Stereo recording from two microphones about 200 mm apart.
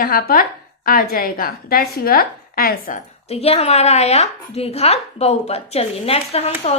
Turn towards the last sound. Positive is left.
turn(degrees=30)  # may be behind; listen again after turning